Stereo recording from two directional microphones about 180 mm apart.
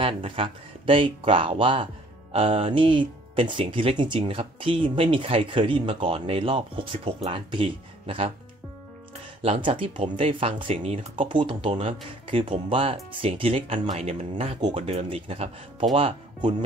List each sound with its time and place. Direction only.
0.0 s speech: 30° right (ahead or behind)
9.4 s speech: 35° right (ahead or behind)